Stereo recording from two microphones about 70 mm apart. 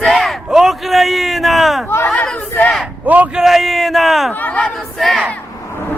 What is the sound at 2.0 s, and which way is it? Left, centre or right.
Battle cry, centre.